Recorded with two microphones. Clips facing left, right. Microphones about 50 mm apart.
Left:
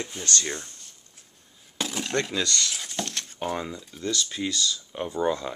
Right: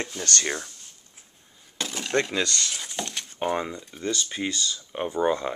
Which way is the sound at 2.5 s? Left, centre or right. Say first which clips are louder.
Left 1 dB; centre.